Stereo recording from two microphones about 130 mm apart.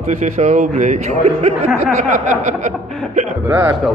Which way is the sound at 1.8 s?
85° right.